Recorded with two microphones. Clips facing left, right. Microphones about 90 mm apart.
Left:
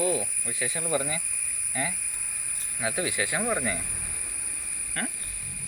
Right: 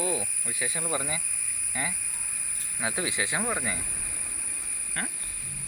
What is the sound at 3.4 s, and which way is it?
Speech, 5° right (ahead or behind).